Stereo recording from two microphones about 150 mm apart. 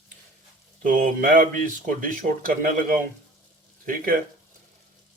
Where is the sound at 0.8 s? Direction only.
65° right (ahead or behind).